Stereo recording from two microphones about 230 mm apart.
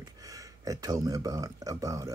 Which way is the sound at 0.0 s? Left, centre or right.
Centre.